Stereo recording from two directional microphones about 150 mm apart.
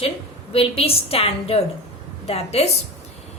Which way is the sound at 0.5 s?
40° left (ahead or behind).